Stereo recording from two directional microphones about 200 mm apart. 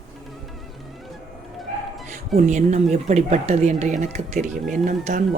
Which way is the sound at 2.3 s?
35° right (ahead or behind).